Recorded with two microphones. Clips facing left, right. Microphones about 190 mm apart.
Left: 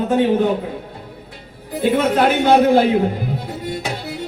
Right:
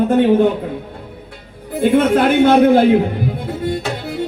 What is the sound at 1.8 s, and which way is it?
A man's voice, 50° right (ahead or behind).